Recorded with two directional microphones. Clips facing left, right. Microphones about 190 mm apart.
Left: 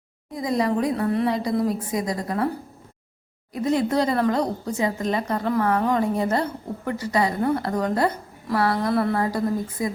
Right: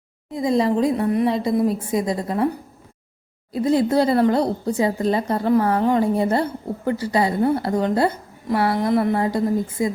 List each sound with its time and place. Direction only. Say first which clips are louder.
0.3 s speech: right 4 dB; 25° right (ahead or behind)
3.5 s speech: right 4 dB; 30° right (ahead or behind)